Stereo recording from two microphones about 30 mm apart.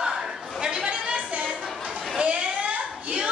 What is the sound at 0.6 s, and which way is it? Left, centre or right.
Chatter, right.